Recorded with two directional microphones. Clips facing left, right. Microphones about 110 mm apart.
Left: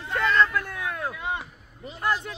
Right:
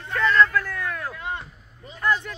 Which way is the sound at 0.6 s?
20° left (ahead or behind).